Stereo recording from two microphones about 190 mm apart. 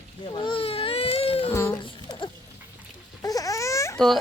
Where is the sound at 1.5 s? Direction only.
15° left (ahead or behind).